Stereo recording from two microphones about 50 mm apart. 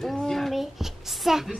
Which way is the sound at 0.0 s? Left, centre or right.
Centre.